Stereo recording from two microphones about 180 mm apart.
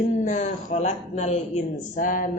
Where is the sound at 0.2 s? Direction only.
40° left (ahead or behind).